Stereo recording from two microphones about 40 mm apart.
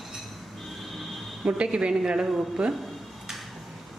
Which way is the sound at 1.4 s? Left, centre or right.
Right.